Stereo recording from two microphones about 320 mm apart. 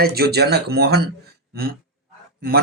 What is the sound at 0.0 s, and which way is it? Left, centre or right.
Speech, right.